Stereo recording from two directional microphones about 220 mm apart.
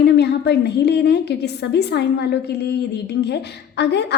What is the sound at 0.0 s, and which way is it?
A woman's voice, 50° left (ahead or behind).